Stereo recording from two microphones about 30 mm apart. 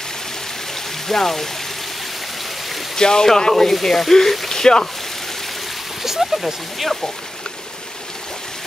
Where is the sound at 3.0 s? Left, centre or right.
Left.